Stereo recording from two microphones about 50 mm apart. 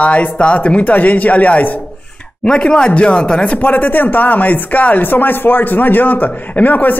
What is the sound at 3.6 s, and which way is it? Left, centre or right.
A man's voice, left.